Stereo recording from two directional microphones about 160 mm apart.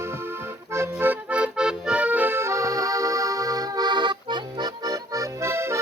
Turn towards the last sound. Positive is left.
turn(degrees=-15)  # may be behind; listen again after turning